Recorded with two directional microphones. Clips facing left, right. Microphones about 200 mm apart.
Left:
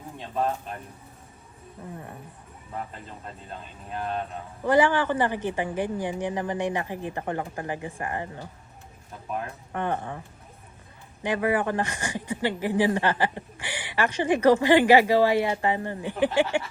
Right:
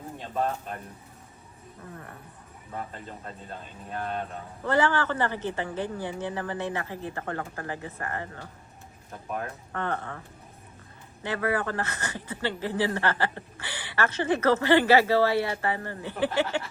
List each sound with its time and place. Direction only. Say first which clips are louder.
4.6 s speech: left 4 dB; 15° left (ahead or behind)
9.7 s speech: left 3 dB; 15° left (ahead or behind)
11.2 s speech: left 3 dB; 15° left (ahead or behind)